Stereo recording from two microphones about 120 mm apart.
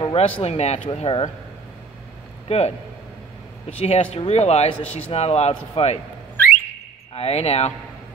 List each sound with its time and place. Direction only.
0.0 s speech: 50° left (ahead or behind)
2.4 s a man's voice: 60° left (ahead or behind)
3.8 s speech: 60° left (ahead or behind)
7.2 s speech: 60° left (ahead or behind)